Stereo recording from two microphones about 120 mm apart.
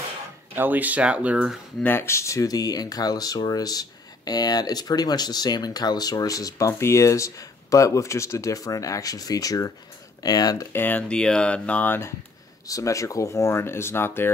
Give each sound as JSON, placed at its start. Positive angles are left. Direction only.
{"t": 0.6, "sound": "speech", "side_deg": -15}
{"t": 1.8, "sound": "speech", "side_deg": 20}
{"t": 10.7, "sound": "speech", "side_deg": 15}
{"t": 12.6, "sound": "speech", "side_deg": 25}